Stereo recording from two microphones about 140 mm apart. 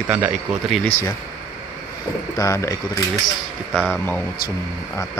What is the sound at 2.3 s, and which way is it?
Speech, 20° left (ahead or behind).